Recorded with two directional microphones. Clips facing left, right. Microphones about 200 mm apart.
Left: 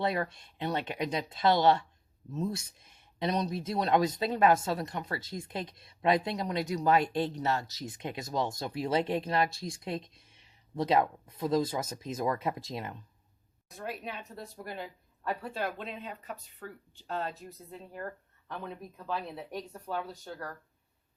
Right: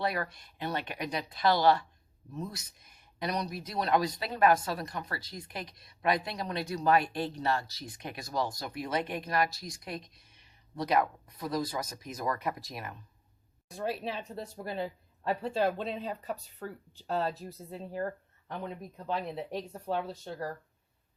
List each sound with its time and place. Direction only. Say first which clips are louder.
0.0 s speech: left 2 dB; 25° left (ahead or behind)
13.7 s speech: right 5 dB; 30° right (ahead or behind)
18.4 s speech: right 2 dB; 20° right (ahead or behind)